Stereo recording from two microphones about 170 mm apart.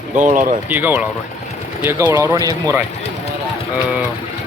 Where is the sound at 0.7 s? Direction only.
10° right (ahead or behind).